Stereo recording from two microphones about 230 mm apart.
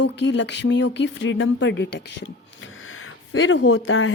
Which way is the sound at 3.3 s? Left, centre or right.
Left.